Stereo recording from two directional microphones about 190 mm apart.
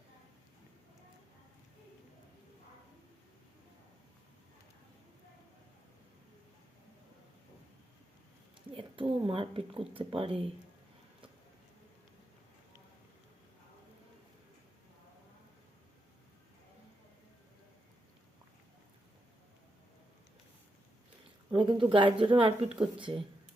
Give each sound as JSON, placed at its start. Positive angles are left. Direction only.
{"t": 8.7, "sound": "speech", "side_deg": -30}
{"t": 21.5, "sound": "speech", "side_deg": -25}